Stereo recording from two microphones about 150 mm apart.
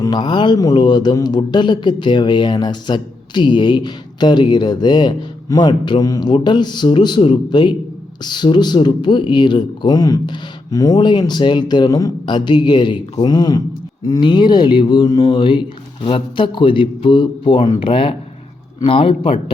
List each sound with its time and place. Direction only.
0.0 s speech: 25° left (ahead or behind)